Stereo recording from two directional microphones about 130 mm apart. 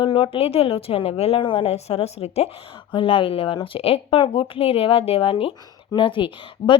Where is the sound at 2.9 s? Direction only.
40° left (ahead or behind).